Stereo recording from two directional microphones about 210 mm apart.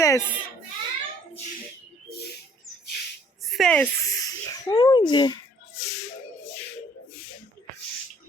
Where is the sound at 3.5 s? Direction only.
Centre (ahead or behind); by 5.3 s 20° left (ahead or behind).